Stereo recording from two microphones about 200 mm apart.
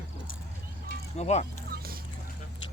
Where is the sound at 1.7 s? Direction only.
50° right (ahead or behind).